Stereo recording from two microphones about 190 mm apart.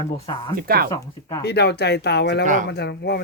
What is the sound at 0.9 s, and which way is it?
Speech, 20° left (ahead or behind).